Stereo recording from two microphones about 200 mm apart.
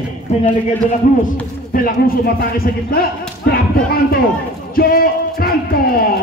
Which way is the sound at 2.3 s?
45° left (ahead or behind).